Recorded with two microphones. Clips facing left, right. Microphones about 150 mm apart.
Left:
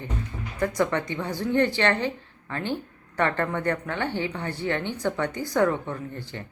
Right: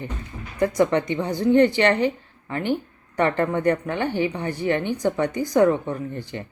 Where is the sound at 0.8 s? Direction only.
20° right (ahead or behind).